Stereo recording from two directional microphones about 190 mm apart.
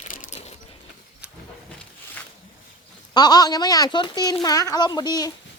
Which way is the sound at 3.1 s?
20° left (ahead or behind).